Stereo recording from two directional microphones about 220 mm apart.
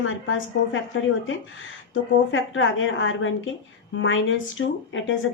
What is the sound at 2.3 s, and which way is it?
A woman's voice, 60° left (ahead or behind).